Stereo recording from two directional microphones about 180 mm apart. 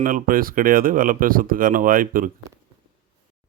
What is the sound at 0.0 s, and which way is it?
Speech, 50° right (ahead or behind).